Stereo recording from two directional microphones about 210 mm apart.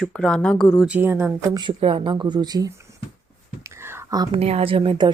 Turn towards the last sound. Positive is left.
turn(degrees=-20)  # may be behind; listen again after turning